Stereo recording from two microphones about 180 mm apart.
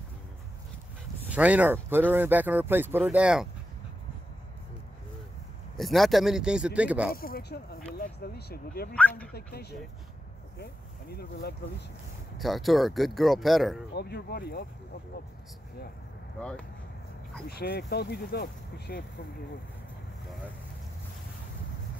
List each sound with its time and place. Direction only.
1.3 s speech: 5° right (ahead or behind)
5.8 s speech: centre (ahead or behind)
7.2 s speech: 55° left (ahead or behind)
12.4 s speech: centre (ahead or behind)
13.9 s speech: 65° left (ahead or behind)
16.3 s speech: 5° left (ahead or behind)
17.5 s speech: 60° left (ahead or behind)